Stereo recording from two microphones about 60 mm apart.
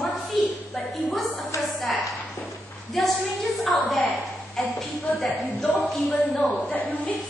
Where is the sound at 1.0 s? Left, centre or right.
Centre.